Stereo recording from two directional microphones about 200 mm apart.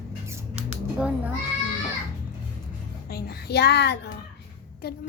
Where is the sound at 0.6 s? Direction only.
5° right (ahead or behind).